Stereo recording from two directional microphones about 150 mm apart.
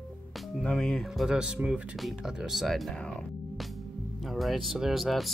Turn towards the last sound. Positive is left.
turn(degrees=0)  # may be behind; listen again after turning